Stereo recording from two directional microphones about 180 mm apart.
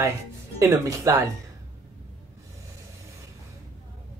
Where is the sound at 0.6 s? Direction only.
15° right (ahead or behind).